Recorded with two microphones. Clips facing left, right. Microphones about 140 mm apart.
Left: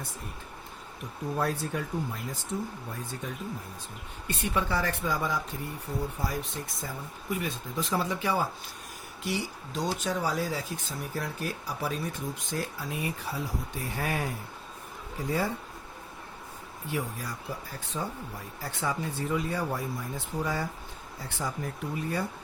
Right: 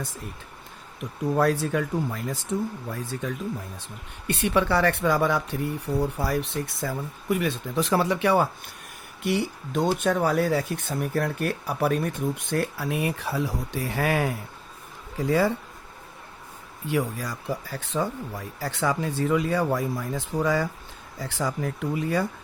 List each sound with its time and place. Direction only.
1.4 s speech: 90° right
4.3 s speech: 75° right (ahead or behind); by 15.5 s 90° right
16.9 s speech: 90° right